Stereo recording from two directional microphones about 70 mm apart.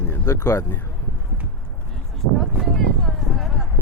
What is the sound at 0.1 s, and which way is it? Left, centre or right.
Speech, left.